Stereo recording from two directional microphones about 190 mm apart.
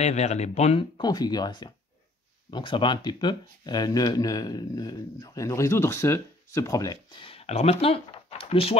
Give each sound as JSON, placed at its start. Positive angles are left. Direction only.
{"t": 0.0, "sound": "speech", "side_deg": 35}